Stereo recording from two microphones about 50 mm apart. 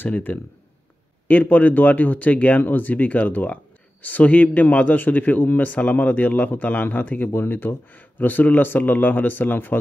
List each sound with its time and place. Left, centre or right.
0.0 s a man's voice: left